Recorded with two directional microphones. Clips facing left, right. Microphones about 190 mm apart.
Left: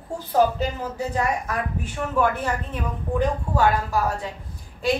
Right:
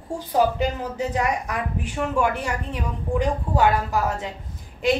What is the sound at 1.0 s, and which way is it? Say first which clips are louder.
Speech: even; 15° right (ahead or behind).